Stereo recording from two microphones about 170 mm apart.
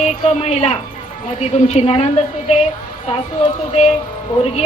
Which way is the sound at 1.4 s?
40° left (ahead or behind).